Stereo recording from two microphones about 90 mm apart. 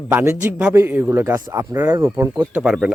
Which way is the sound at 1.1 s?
30° right (ahead or behind).